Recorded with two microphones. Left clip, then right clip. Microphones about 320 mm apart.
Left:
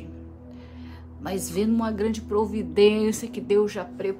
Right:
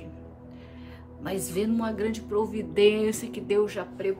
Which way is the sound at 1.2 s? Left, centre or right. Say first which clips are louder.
Left 2 dB; centre.